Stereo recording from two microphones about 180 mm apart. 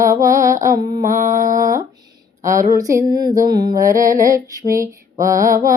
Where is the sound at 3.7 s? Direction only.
50° right (ahead or behind).